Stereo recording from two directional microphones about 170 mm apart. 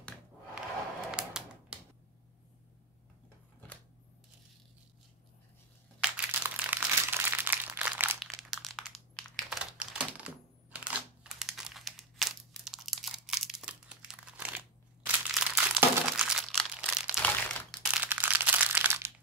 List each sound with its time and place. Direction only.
1.1 s typewriter: 5° right (ahead or behind)
6.0 s crumpling: 10° right (ahead or behind)
8.4 s computer keyboard: centre (ahead or behind)
17.2 s crumpling: 5° left (ahead or behind)
17.9 s crumpling: 10° right (ahead or behind)